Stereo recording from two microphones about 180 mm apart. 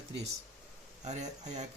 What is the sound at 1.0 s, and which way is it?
Speech, 40° right (ahead or behind).